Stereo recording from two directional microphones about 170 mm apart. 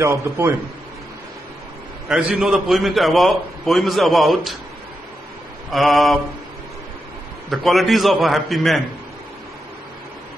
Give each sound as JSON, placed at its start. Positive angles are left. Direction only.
{"t": 0.0, "sound": "a man's voice", "side_deg": -15}
{"t": 2.0, "sound": "a man's voice", "side_deg": -5}
{"t": 5.7, "sound": "a man's voice", "side_deg": 0}
{"t": 7.5, "sound": "a man's voice", "side_deg": 0}